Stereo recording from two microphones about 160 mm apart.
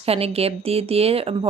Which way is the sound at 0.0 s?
40° right (ahead or behind).